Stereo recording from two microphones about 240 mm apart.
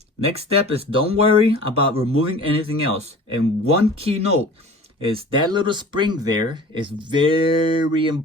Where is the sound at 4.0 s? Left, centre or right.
Right.